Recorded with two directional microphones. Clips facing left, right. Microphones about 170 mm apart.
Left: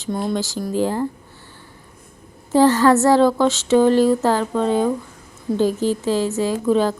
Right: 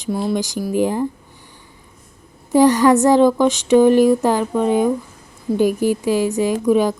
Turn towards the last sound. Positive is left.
turn(degrees=-15)  # may be behind; listen again after turning